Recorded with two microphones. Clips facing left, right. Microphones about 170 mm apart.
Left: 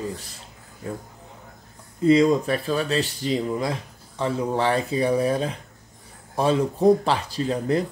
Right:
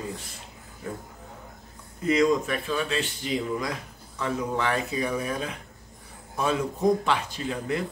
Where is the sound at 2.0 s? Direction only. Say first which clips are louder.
Left 5 dB; 30° left (ahead or behind).